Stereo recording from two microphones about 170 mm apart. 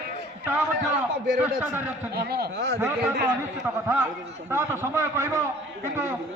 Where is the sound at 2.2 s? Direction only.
70° right (ahead or behind).